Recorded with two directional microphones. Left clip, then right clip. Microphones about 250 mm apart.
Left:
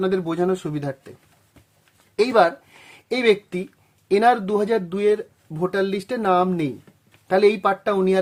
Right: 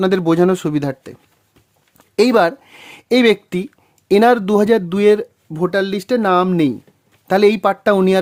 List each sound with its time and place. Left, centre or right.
0.0 s speech: right
2.1 s speech: right